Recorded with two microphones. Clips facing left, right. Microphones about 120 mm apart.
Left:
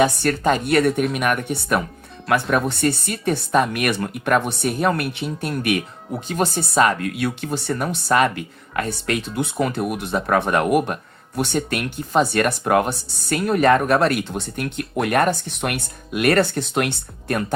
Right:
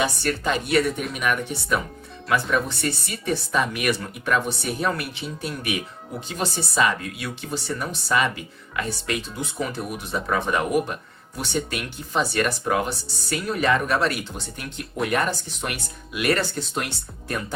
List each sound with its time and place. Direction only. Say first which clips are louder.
0.0 s speech: left 6 dB; 50° left (ahead or behind)